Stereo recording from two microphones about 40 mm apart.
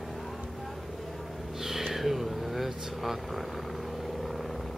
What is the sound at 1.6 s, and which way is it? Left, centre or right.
Vehicle, centre.